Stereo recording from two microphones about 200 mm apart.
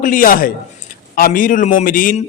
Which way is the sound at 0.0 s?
45° left (ahead or behind).